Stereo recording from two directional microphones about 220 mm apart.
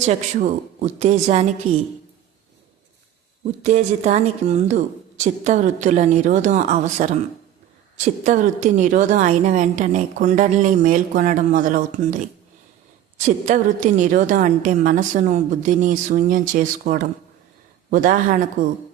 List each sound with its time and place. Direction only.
0.0 s a woman's voice: 35° right (ahead or behind)
3.6 s a woman's voice: 30° right (ahead or behind)